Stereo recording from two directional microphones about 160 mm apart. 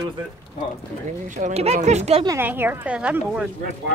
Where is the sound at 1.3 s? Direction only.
45° right (ahead or behind).